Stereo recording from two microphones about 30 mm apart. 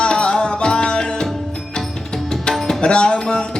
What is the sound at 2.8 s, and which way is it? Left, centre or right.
Tabla, left.